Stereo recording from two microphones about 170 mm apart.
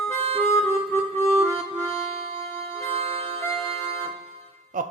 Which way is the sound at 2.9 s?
35° right (ahead or behind).